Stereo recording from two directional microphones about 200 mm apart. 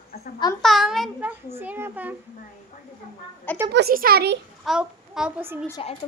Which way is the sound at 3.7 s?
55° right (ahead or behind).